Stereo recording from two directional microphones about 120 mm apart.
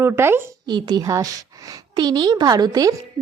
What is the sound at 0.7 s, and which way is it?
A woman's voice, 35° right (ahead or behind).